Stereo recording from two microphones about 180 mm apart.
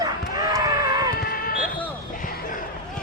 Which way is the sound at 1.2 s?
55° left (ahead or behind).